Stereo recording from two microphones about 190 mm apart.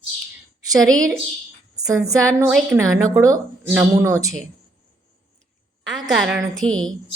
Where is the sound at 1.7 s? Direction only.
20° right (ahead or behind).